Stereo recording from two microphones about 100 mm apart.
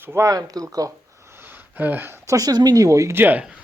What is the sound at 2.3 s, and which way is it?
Speech, 40° right (ahead or behind).